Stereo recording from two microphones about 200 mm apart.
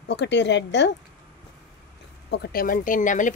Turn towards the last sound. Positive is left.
turn(degrees=40)  # may be behind; listen again after turning